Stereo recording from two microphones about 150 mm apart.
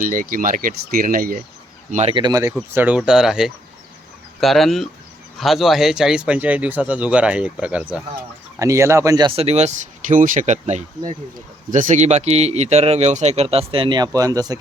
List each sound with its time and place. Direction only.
0.0 s speech: 65° right (ahead or behind)
1.9 s speech: 45° right (ahead or behind)
2.1 s speech: 25° right (ahead or behind)
2.7 s a man's voice: 10° right (ahead or behind)
8.5 s speech: 20° right (ahead or behind)
9.3 s speech: 45° right (ahead or behind); by 14.6 s 25° right (ahead or behind)